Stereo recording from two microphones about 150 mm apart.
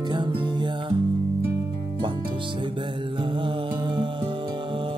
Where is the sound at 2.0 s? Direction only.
35° right (ahead or behind).